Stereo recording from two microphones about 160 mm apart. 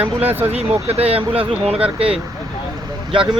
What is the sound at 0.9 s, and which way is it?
Speech, 40° right (ahead or behind).